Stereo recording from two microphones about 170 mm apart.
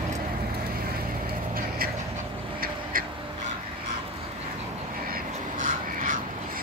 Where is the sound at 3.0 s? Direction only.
55° right (ahead or behind).